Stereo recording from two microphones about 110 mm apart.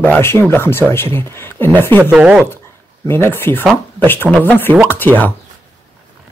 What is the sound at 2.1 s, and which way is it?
Speech, 10° right (ahead or behind).